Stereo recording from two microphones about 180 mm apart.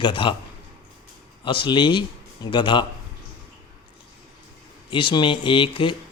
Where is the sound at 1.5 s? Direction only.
25° left (ahead or behind).